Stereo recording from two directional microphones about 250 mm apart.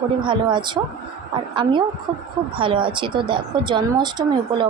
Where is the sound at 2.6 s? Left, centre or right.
Centre.